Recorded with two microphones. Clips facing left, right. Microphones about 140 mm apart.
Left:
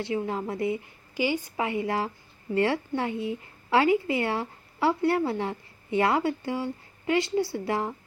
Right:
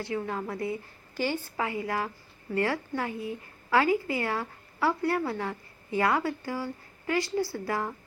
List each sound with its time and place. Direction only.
0.0 s a woman's voice: 25° left (ahead or behind)